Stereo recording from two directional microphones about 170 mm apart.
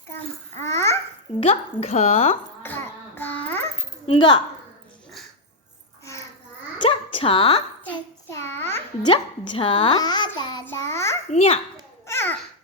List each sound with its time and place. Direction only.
0.5 s speech: 15° left (ahead or behind)
1.4 s a woman's voice: 40° left (ahead or behind)
2.6 s a sound: 10° left (ahead or behind)
4.0 s speech: 30° left (ahead or behind)
6.7 s a sound: 30° left (ahead or behind)
7.9 s child singing: 15° left (ahead or behind)
9.0 s a child's voice: 30° left (ahead or behind)
10.7 s child singing: 15° left (ahead or behind)
11.3 s a woman's voice: 40° left (ahead or behind)
12.0 s babbling: 15° left (ahead or behind)